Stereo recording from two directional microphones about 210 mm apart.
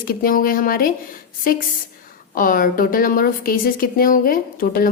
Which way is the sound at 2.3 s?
40° left (ahead or behind).